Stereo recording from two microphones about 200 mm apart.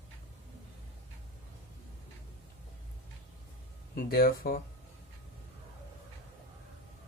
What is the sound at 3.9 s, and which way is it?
Speech, 50° left (ahead or behind).